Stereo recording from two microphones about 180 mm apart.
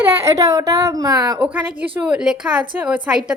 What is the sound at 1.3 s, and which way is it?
A woman's voice, 5° right (ahead or behind).